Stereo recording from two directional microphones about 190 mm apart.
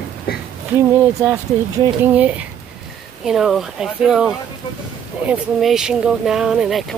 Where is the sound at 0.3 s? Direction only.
55° left (ahead or behind).